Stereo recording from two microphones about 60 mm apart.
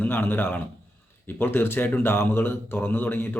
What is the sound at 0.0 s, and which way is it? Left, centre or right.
Speech, left.